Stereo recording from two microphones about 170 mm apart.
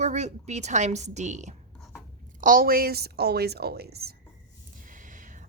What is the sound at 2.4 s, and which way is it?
A woman's voice, 55° right (ahead or behind).